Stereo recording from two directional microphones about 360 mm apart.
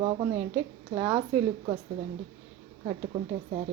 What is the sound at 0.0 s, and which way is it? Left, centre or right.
Speech, centre.